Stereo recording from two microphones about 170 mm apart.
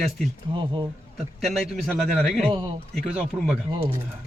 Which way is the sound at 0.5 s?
25° right (ahead or behind).